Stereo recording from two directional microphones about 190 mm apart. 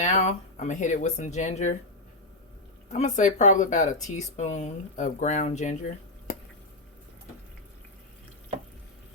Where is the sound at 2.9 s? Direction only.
40° left (ahead or behind).